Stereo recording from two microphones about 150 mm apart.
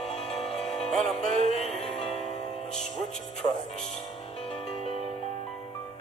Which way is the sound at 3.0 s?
Centre (ahead or behind).